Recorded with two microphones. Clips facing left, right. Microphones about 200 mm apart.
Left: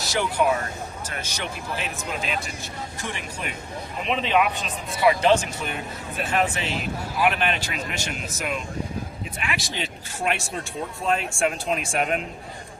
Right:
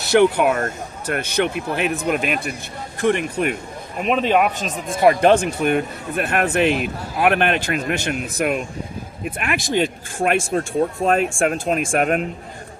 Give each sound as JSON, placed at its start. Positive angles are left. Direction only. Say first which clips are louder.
{"t": 0.0, "sound": "speech", "louder": "right 8 dB", "side_deg": -60}